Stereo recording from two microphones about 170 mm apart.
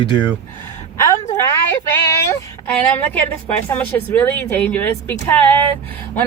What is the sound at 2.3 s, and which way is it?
Speech, 10° left (ahead or behind).